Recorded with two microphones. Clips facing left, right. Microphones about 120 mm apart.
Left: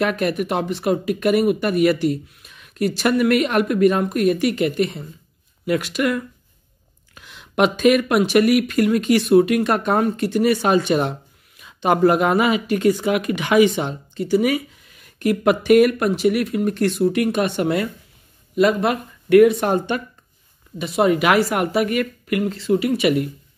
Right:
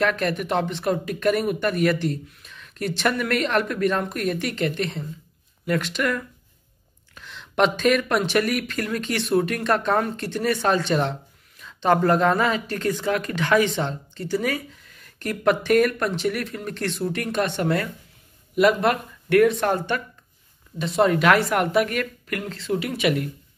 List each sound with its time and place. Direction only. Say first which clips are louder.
0.0 s speech: left 3 dB; 10° left (ahead or behind)
18.5 s speech: left 1 dB; 5° right (ahead or behind)
19.6 s speech: left 3 dB; 20° left (ahead or behind)